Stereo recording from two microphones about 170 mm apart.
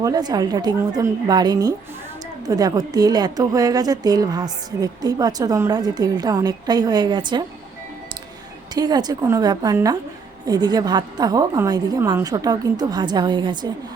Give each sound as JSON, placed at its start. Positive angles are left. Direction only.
{"t": 0.0, "sound": "a woman's voice", "side_deg": -25}
{"t": 8.7, "sound": "a woman's voice", "side_deg": -25}